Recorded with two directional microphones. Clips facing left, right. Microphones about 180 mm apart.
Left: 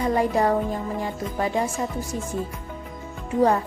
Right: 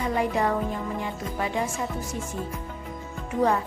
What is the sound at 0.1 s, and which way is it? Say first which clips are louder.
Music: left 3 dB; 40° left (ahead or behind).